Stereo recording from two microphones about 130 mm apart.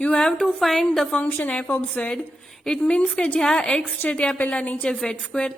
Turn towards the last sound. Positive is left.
turn(degrees=10)  # may be behind; listen again after turning